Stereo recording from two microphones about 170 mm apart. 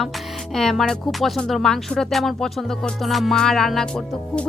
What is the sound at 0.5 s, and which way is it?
Speech, centre (ahead or behind).